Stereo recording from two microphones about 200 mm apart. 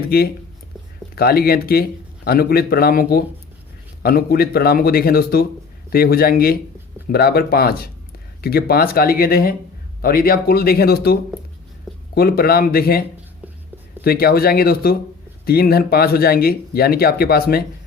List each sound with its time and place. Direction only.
0.0 s speech: 50° left (ahead or behind)
14.0 s speech: 50° left (ahead or behind)